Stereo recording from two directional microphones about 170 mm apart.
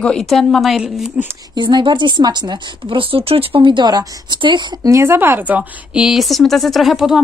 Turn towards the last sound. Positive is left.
turn(degrees=-5)  # may be behind; listen again after turning